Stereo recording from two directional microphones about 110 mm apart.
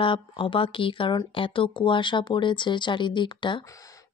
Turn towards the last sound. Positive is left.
turn(degrees=45)  # may be behind; listen again after turning